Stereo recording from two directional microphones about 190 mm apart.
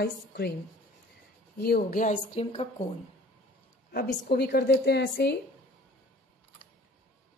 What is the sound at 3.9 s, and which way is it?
A woman's voice, 55° left (ahead or behind).